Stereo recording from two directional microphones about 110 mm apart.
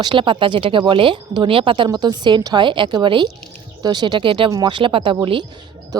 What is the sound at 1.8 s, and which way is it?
A woman's voice, 40° right (ahead or behind).